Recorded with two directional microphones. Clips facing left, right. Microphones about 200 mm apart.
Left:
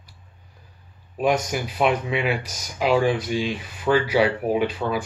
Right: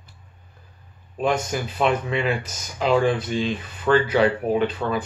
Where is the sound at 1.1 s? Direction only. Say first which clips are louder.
Left 1 dB; 10° left (ahead or behind).